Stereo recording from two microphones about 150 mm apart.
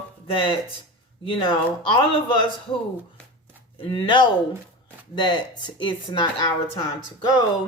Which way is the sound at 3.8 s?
35° left (ahead or behind).